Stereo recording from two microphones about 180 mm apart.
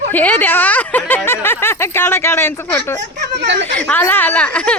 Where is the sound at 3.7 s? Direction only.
10° left (ahead or behind).